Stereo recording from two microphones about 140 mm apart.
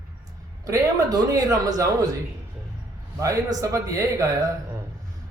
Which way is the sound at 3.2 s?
25° right (ahead or behind).